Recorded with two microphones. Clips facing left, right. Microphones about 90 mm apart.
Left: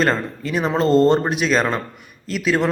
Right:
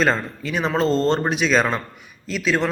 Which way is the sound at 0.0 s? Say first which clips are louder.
Left 1 dB; centre (ahead or behind).